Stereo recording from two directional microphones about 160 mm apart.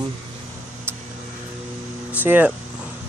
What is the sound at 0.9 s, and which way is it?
Vehicle, 15° right (ahead or behind).